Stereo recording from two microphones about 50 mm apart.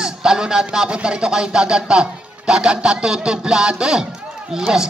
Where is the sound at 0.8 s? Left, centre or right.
Right.